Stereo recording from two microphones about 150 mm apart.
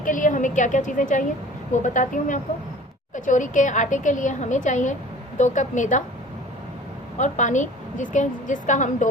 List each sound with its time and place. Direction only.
0.0 s a woman's voice: 60° left (ahead or behind)
7.2 s a woman's voice: 55° left (ahead or behind)